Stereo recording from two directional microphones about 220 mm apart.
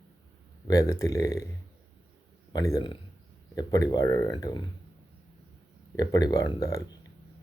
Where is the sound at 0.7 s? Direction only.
15° left (ahead or behind).